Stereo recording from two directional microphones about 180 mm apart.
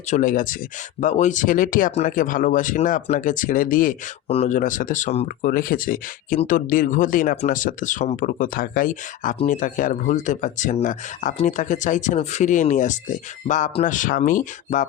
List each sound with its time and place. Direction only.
0.1 s speech: 45° left (ahead or behind)
4.3 s speech: 40° left (ahead or behind)
5.5 s speech: 50° left (ahead or behind)